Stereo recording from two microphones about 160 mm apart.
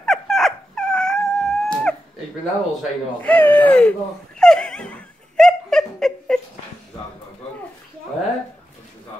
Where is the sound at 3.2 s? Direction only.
10° left (ahead or behind).